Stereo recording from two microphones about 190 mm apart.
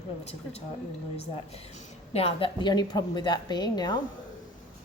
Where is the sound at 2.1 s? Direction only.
30° left (ahead or behind).